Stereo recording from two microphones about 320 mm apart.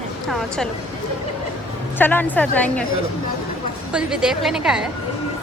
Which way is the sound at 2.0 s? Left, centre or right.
Centre.